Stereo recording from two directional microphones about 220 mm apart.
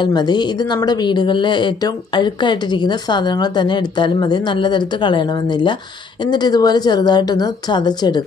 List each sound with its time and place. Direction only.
0.0 s speech: 20° left (ahead or behind)